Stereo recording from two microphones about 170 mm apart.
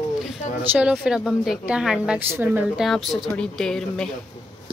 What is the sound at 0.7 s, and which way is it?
A woman's voice, 5° right (ahead or behind).